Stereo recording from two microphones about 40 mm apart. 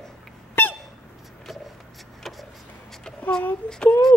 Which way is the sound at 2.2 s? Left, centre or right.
Centre.